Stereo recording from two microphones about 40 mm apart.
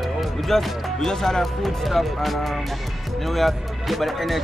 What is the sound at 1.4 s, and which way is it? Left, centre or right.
Speech, centre.